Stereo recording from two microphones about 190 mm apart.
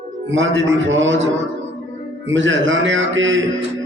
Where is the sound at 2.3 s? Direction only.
80° right.